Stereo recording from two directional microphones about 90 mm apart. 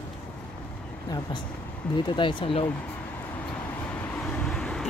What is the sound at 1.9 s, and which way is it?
Speech, 65° left (ahead or behind).